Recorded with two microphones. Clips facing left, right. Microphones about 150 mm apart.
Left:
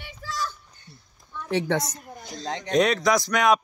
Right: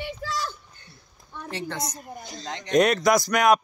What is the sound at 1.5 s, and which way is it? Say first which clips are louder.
Speech: left 9 dB; 90° left.